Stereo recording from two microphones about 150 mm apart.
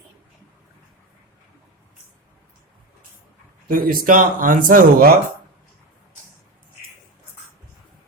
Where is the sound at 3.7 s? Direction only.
70° right (ahead or behind).